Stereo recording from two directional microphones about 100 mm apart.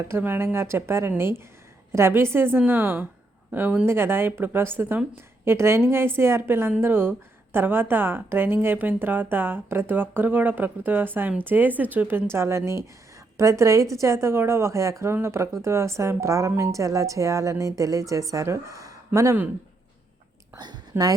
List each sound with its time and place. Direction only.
0.0 s a woman's voice: 25° right (ahead or behind)
20.6 s a woman's voice: 45° right (ahead or behind)
20.9 s a woman's voice: 20° right (ahead or behind)